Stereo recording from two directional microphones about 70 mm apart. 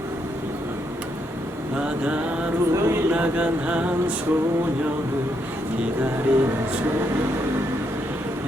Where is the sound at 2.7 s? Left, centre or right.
Right.